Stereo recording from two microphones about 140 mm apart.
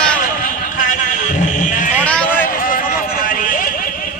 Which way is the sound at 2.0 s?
10° left (ahead or behind).